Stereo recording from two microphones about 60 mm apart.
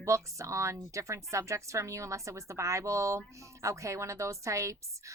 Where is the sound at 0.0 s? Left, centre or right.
Right.